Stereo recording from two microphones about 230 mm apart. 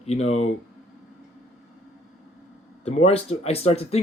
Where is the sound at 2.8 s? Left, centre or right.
Left.